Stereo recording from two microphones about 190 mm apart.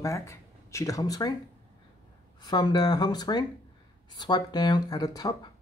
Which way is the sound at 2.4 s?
20° left (ahead or behind).